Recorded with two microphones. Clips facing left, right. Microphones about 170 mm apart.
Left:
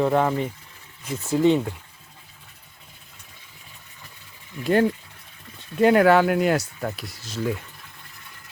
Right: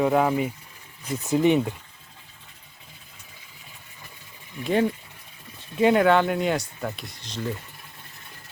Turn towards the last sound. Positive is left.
turn(degrees=5)  # may be behind; listen again after turning